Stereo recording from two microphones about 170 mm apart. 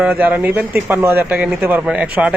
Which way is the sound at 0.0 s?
10° right (ahead or behind).